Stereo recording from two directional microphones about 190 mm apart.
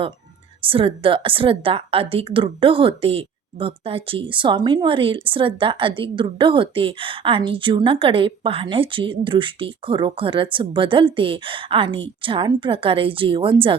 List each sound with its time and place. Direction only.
0.6 s a woman's voice: 30° right (ahead or behind)